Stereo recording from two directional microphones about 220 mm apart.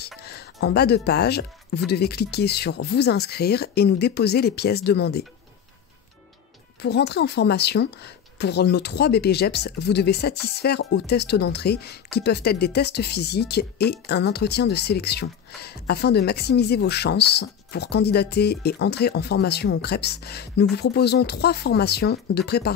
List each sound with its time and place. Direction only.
0.2 s speech: 45° left (ahead or behind)
6.8 s speech: 50° left (ahead or behind)